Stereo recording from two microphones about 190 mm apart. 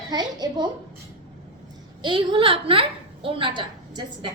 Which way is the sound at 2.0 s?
25° right (ahead or behind).